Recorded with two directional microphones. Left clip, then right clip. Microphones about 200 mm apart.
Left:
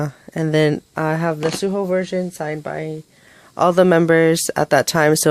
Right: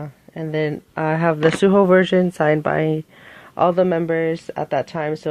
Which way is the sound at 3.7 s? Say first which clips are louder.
Left 5 dB; 35° left (ahead or behind).